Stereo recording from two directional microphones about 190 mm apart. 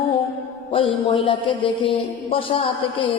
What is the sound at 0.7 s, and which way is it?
A man's voice, 25° left (ahead or behind).